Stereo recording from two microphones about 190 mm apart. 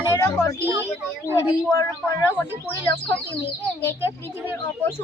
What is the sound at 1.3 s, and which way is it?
Speech, 15° left (ahead or behind).